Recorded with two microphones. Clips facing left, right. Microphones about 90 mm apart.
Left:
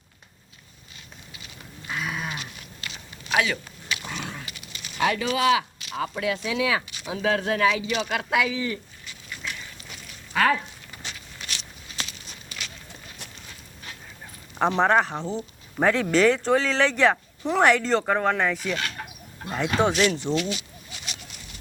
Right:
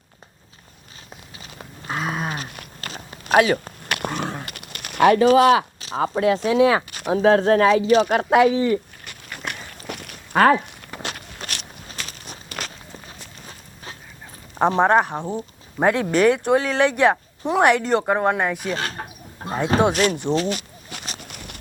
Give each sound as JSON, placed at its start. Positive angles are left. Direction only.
{"t": 1.4, "sound": "goat", "side_deg": -40}
{"t": 2.5, "sound": "a sound", "side_deg": -50}
{"t": 5.5, "sound": "speech", "side_deg": -35}
{"t": 9.0, "sound": "walk", "side_deg": -60}
{"t": 14.8, "sound": "speech", "side_deg": -15}
{"t": 18.7, "sound": "a sound", "side_deg": -35}
{"t": 19.9, "sound": "speech", "side_deg": -50}
{"t": 20.3, "sound": "a sound", "side_deg": -45}
{"t": 21.2, "sound": "clip-clop", "side_deg": -60}